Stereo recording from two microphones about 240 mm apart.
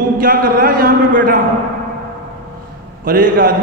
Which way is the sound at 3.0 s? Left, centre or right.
Right.